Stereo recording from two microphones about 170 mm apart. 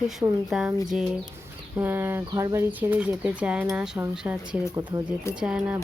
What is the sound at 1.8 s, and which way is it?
Speech, 10° right (ahead or behind).